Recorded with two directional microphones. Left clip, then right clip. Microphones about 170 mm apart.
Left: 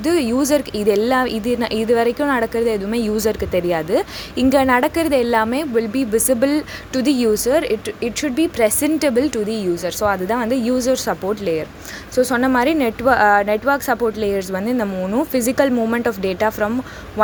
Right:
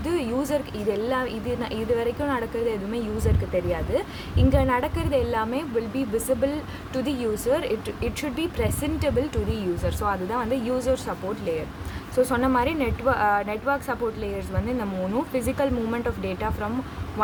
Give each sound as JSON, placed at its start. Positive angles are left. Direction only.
{"t": 0.0, "sound": "a woman's voice", "side_deg": 30}
{"t": 12.1, "sound": "a woman's voice", "side_deg": 25}